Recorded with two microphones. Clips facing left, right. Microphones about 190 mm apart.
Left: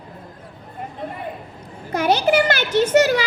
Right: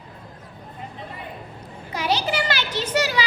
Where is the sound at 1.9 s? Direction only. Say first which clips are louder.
Left 7 dB; 50° left (ahead or behind).